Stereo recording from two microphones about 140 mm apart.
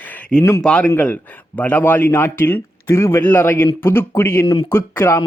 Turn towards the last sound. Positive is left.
turn(degrees=15)  # may be behind; listen again after turning